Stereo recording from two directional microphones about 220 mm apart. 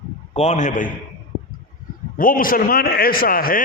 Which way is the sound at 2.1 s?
40° left (ahead or behind).